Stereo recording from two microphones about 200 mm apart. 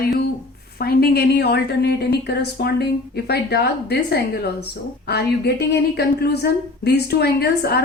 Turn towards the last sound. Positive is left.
turn(degrees=55)  # may be behind; listen again after turning